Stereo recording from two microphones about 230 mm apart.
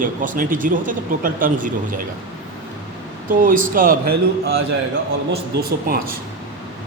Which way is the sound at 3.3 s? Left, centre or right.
Right.